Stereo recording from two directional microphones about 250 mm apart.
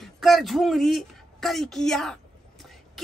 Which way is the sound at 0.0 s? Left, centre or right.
Centre.